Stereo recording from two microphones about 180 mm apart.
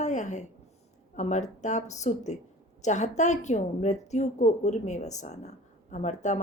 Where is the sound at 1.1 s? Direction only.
40° left (ahead or behind).